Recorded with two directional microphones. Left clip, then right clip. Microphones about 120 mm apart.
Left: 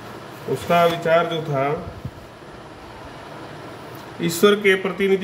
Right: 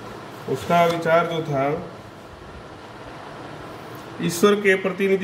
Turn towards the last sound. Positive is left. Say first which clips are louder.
# left 1 dB
turn(degrees=30)  # may be behind; listen again after turning